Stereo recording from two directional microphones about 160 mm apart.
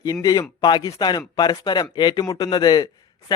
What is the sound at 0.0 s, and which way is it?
A man's voice, 20° left (ahead or behind).